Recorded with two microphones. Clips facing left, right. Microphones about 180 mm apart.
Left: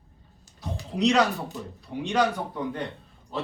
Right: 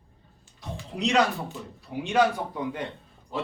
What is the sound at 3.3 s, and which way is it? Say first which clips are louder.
Music: even; 15° right (ahead or behind).